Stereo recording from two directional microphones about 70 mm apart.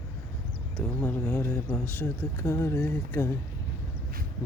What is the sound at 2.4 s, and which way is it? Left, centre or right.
Speech, left.